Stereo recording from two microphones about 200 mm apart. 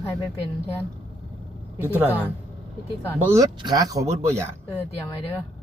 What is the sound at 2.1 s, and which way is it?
Speech, 10° left (ahead or behind).